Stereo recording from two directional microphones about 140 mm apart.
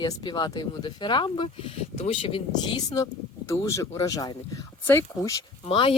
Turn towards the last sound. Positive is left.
turn(degrees=40)  # may be behind; listen again after turning